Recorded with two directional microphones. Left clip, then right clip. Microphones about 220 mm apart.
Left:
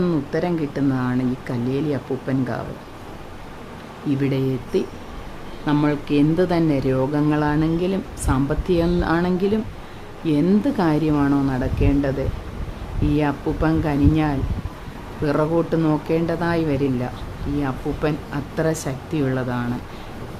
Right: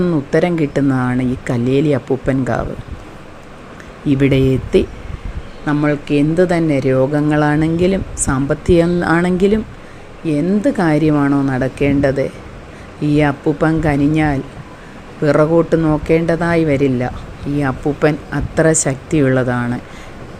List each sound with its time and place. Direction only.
0.3 s speech: 20° right (ahead or behind)
4.2 s speech: 20° right (ahead or behind)
5.7 s speech: 5° right (ahead or behind)